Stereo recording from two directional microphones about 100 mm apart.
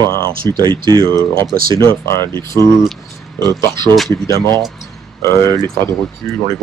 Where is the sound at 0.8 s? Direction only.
50° right (ahead or behind).